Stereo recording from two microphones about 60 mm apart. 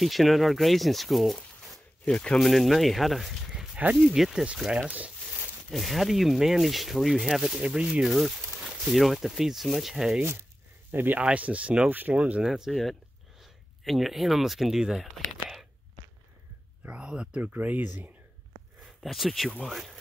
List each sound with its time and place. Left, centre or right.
0.0 s speech: centre
4.7 s speech: right
5.7 s speech: centre
7.6 s speech: centre
8.7 s speech: centre
10.9 s speech: right
11.1 s speech: right
12.4 s speech: centre
16.8 s speech: centre
17.4 s speech: right
18.8 s speech: centre